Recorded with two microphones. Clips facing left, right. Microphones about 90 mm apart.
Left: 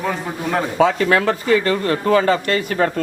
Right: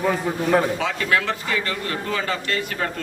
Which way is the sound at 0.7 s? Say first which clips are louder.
Left 7 dB; 40° left (ahead or behind).